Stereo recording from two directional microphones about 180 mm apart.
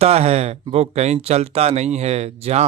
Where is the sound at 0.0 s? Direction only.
35° right (ahead or behind).